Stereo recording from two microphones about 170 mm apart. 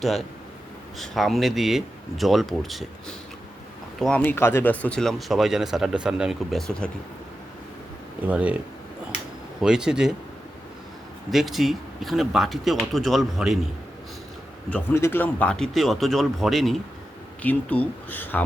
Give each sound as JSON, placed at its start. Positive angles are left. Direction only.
{"t": 0.9, "sound": "speech", "side_deg": 0}
{"t": 4.0, "sound": "speech", "side_deg": 10}
{"t": 8.3, "sound": "speech", "side_deg": -5}
{"t": 9.6, "sound": "speech", "side_deg": -5}
{"t": 11.3, "sound": "speech", "side_deg": 0}
{"t": 14.7, "sound": "speech", "side_deg": 15}